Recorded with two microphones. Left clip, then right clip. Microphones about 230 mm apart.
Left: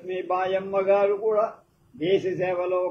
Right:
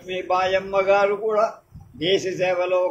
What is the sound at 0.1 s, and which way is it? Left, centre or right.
A man's voice, right.